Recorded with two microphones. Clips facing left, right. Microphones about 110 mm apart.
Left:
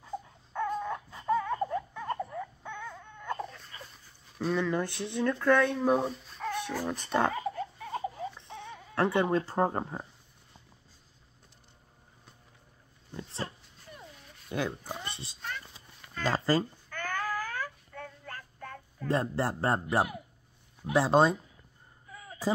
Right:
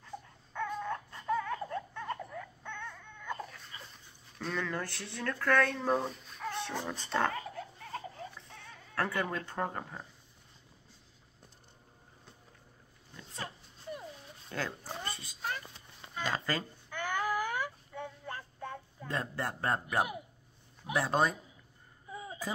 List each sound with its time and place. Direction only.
0.0 s baby cry: 10° left (ahead or behind)
3.3 s baby cry: centre (ahead or behind)
4.4 s speech: 10° left (ahead or behind)
6.9 s speech: 10° left (ahead or behind)
7.9 s baby cry: 20° left (ahead or behind)
13.1 s dog: 30° left (ahead or behind)
14.5 s cat: 15° left (ahead or behind)
16.3 s speech: 35° left (ahead or behind)
16.9 s child singing: 15° right (ahead or behind)
19.0 s speech: 30° left (ahead or behind)
22.1 s a sound: 20° right (ahead or behind)